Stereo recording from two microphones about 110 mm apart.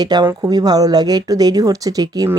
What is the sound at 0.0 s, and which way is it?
Speech, 40° right (ahead or behind).